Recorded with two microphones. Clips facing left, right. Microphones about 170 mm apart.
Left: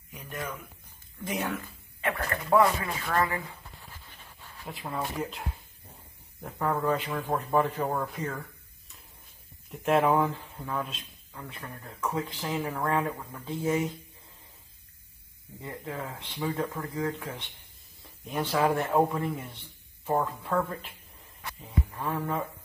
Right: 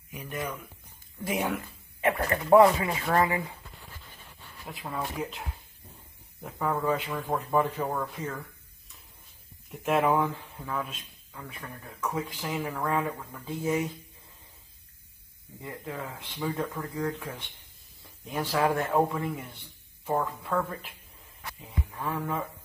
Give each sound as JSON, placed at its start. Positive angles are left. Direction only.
{"t": 0.1, "sound": "speech", "side_deg": 0}
{"t": 4.6, "sound": "speech", "side_deg": 0}
{"t": 7.1, "sound": "speech", "side_deg": 10}
{"t": 9.7, "sound": "speech", "side_deg": 0}
{"t": 12.2, "sound": "speech", "side_deg": -10}
{"t": 12.4, "sound": "speech", "side_deg": 10}
{"t": 13.5, "sound": "speech", "side_deg": -5}
{"t": 16.3, "sound": "speech", "side_deg": 10}
{"t": 18.3, "sound": "speech", "side_deg": 0}
{"t": 21.5, "sound": "music", "side_deg": 0}